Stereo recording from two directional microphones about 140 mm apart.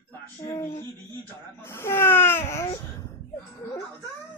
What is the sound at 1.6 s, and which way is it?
Babbling, 15° left (ahead or behind).